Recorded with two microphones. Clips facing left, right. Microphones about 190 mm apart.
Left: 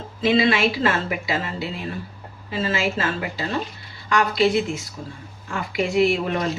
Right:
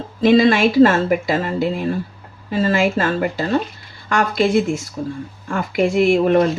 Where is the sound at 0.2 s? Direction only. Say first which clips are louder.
Right 6 dB; 45° right (ahead or behind).